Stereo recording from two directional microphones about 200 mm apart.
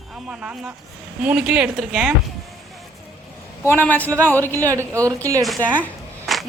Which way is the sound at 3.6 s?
10° left (ahead or behind).